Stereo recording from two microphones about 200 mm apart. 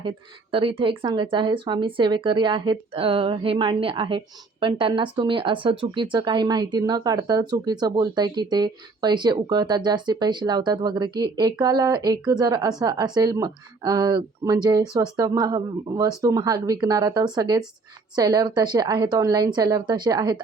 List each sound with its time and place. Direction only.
0.5 s speech: 25° right (ahead or behind)